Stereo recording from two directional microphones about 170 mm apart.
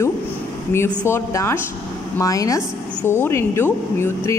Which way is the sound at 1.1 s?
15° left (ahead or behind).